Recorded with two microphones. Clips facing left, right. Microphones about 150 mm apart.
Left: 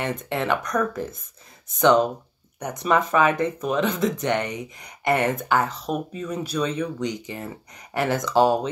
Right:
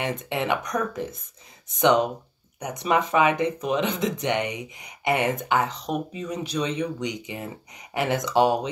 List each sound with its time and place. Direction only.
0.0 s speech: 15° right (ahead or behind)